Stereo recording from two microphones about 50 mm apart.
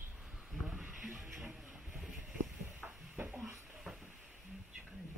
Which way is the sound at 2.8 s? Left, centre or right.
Right.